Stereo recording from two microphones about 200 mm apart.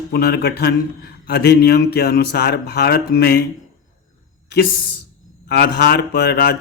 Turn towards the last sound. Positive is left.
turn(degrees=55)  # may be behind; listen again after turning